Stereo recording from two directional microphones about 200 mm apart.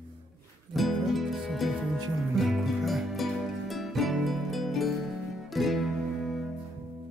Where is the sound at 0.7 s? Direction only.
Centre (ahead or behind).